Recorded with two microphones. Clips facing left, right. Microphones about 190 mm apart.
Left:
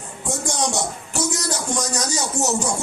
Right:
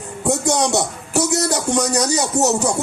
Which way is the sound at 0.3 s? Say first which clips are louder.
Right 7 dB; 65° right (ahead or behind).